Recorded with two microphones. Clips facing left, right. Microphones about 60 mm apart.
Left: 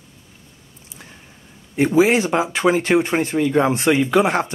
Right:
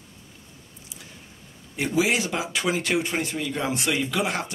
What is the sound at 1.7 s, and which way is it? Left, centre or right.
Speech, left.